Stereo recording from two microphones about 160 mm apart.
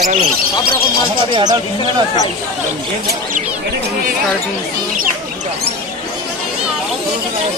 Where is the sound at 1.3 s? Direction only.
25° right (ahead or behind).